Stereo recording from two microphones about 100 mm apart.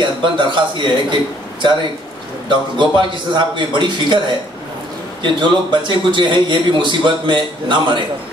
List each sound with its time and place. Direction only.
0.0 s a man's voice: 55° right (ahead or behind)
5.2 s a man's voice: 50° right (ahead or behind)